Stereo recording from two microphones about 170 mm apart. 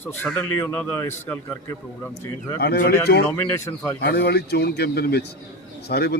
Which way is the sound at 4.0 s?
75° left (ahead or behind).